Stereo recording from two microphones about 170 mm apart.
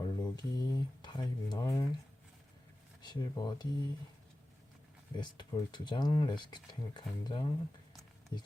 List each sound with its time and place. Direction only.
0.0 s speech: 25° left (ahead or behind)
3.0 s speech: 25° left (ahead or behind)
5.1 s speech: 25° left (ahead or behind)